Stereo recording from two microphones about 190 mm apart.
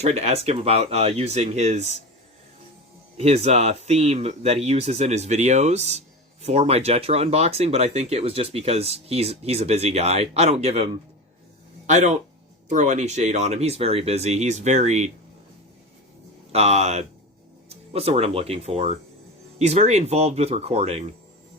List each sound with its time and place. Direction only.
0.0 s speech: 35° right (ahead or behind)
3.2 s speech: 35° right (ahead or behind)
11.9 s speech: 40° right (ahead or behind)
16.5 s speech: 35° right (ahead or behind)